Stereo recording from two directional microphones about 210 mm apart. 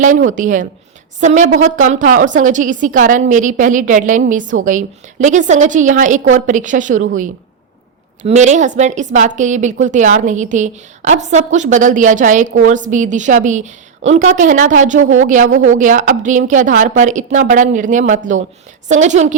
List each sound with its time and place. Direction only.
0.3 s a woman's voice: 40° right (ahead or behind)
8.2 s a woman's voice: 35° right (ahead or behind)